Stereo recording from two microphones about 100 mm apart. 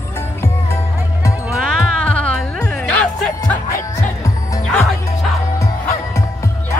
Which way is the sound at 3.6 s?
30° left (ahead or behind).